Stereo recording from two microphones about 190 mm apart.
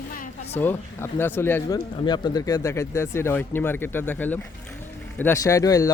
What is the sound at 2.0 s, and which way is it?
Speech, 25° left (ahead or behind).